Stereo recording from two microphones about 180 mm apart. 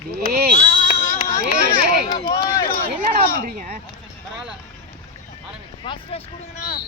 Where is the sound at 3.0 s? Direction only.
50° right (ahead or behind).